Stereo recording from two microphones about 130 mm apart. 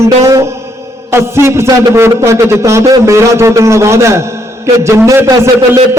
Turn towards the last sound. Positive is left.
turn(degrees=-25)  # may be behind; listen again after turning